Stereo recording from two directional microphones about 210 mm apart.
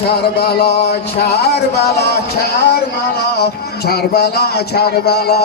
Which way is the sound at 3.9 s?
50° left (ahead or behind).